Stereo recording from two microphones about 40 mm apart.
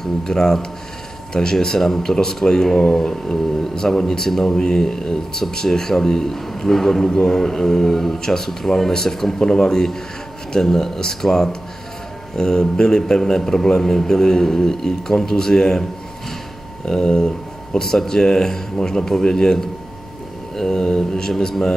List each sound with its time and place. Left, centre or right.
0.0 s speech: centre
16.8 s speech: centre